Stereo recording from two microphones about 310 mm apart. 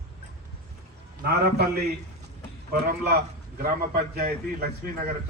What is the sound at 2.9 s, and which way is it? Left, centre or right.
A man's voice, right.